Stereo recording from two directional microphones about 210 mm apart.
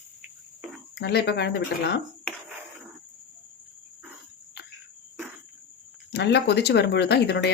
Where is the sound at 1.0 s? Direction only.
50° left (ahead or behind).